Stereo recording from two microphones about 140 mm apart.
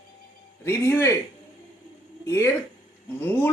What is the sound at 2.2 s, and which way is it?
Speech, 20° left (ahead or behind).